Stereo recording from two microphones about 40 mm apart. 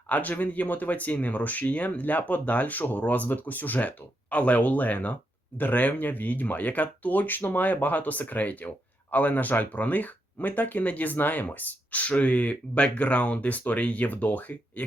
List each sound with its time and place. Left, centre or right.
0.1 s speech: left